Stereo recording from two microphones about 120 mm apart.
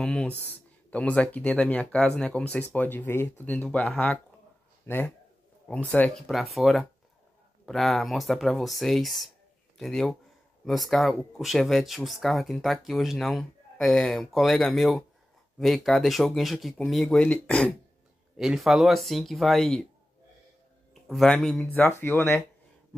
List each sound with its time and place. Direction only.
0.0 s speech: 10° left (ahead or behind)
6.2 s speech: centre (ahead or behind)
18.3 s speech: 5° right (ahead or behind)
21.1 s speech: 5° left (ahead or behind)
21.6 s speech: 15° left (ahead or behind)